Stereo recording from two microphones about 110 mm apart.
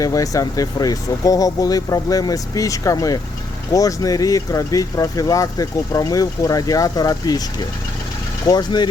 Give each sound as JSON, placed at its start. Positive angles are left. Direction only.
{"t": 0.0, "sound": "speech", "side_deg": 30}
{"t": 8.4, "sound": "speech", "side_deg": 40}